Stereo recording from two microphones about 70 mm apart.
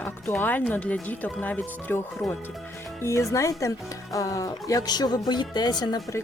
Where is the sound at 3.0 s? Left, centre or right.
Left.